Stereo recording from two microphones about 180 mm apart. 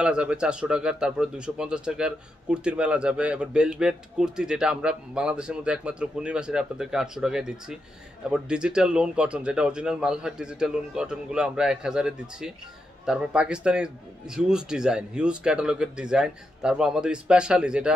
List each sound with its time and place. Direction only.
0.0 s a man's voice: 5° right (ahead or behind)